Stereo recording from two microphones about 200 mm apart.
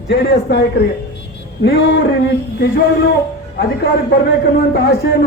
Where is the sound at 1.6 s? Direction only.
55° left (ahead or behind).